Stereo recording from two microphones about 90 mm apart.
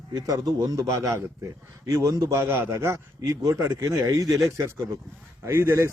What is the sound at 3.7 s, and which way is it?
Speech, 40° right (ahead or behind).